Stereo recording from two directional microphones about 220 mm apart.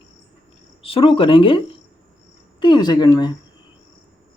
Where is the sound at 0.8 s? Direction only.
25° left (ahead or behind).